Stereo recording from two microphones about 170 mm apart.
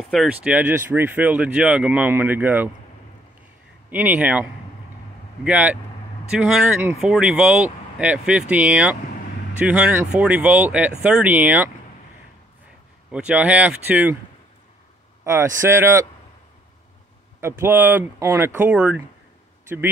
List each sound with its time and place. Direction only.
0.1 s speech: 5° right (ahead or behind)
3.9 s speech: 10° right (ahead or behind)
13.1 s speech: 5° right (ahead or behind)
15.2 s speech: 15° right (ahead or behind)
17.4 s speech: 15° right (ahead or behind)